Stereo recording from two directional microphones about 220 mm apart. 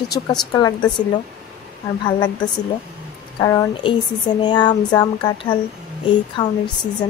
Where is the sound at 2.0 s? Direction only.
20° left (ahead or behind).